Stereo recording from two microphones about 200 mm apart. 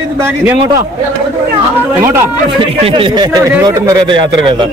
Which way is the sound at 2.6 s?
30° right (ahead or behind).